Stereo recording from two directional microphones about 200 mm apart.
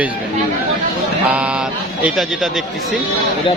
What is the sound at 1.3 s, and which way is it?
A man's voice, 5° right (ahead or behind).